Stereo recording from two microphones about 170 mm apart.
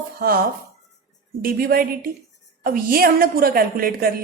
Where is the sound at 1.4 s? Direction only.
60° right (ahead or behind).